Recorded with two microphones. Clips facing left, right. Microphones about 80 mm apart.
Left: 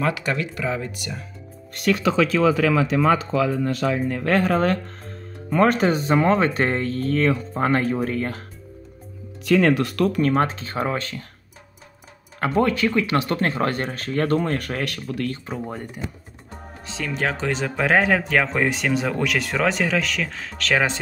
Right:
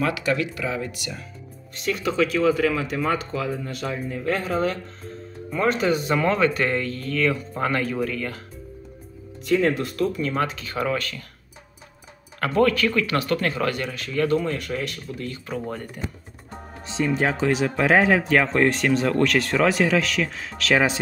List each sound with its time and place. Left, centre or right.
0.0 s speech: left
1.8 s speech: left
3.4 s speech: left
9.5 s speech: left
10.3 s speech: left
12.4 s speech: left
15.5 s speech: centre
16.8 s speech: right
17.2 s speech: centre